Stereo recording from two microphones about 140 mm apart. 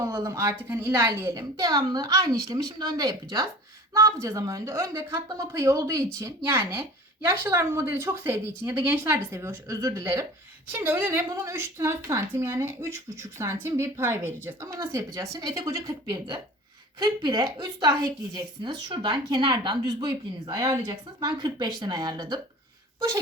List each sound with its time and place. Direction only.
0.0 s a woman's voice: 20° right (ahead or behind)